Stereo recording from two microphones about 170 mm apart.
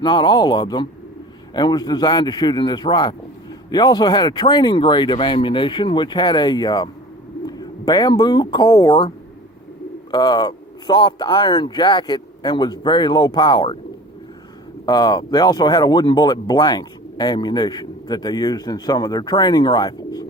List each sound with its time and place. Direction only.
0.0 s speech: 25° left (ahead or behind)
14.8 s speech: 25° left (ahead or behind)